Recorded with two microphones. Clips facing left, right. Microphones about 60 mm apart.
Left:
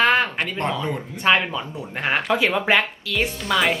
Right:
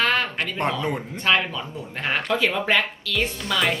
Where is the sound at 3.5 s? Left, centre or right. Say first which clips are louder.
Left 4 dB; centre.